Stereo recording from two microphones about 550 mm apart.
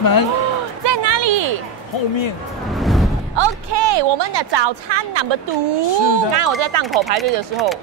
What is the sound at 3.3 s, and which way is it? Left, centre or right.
Speech, right.